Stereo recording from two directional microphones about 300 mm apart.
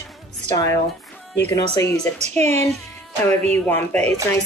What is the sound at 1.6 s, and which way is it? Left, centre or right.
Speech, centre.